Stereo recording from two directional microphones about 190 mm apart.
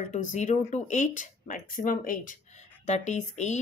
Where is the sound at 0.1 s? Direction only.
40° left (ahead or behind).